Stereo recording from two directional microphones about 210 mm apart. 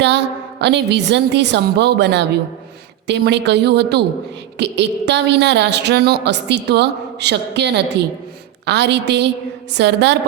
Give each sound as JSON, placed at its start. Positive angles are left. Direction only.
{"t": 0.6, "sound": "a woman's voice", "side_deg": -55}